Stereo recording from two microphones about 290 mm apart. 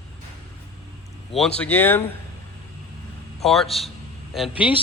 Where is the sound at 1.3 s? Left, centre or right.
Centre.